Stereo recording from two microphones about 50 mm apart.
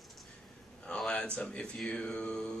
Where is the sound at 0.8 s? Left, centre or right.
Left.